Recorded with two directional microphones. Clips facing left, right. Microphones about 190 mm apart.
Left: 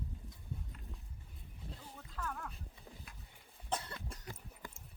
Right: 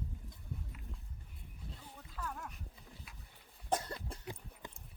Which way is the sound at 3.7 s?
40° right (ahead or behind).